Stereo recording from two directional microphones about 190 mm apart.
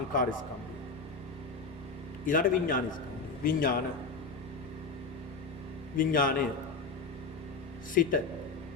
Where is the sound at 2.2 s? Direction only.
45° left (ahead or behind).